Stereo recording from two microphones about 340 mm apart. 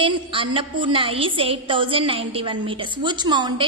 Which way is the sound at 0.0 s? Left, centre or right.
Centre.